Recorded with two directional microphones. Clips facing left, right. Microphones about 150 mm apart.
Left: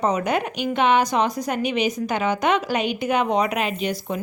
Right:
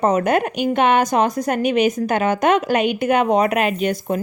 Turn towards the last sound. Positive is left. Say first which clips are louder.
# right 5 dB
turn(degrees=-50)  # may be behind; listen again after turning